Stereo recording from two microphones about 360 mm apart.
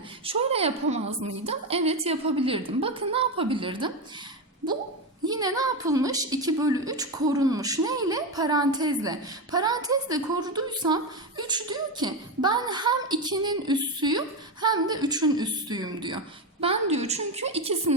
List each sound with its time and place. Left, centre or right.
0.3 s a woman's voice: centre
5.3 s a woman's voice: centre